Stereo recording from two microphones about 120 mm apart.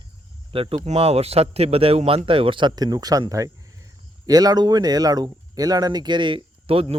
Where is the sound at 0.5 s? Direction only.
50° right (ahead or behind).